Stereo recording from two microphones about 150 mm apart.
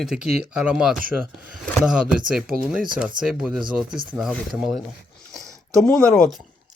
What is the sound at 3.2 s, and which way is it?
Speech, 65° right (ahead or behind).